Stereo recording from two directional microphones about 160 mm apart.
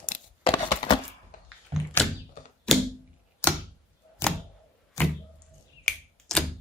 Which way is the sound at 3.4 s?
15° left (ahead or behind).